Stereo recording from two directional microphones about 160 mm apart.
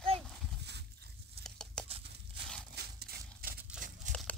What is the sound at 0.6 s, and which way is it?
Horse, 90° right.